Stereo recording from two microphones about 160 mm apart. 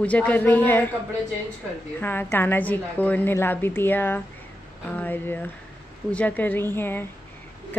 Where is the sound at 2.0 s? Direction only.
10° left (ahead or behind).